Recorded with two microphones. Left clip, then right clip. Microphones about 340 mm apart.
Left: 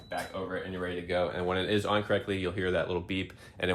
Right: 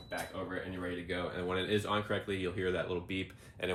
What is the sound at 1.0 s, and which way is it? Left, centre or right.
Speech, left.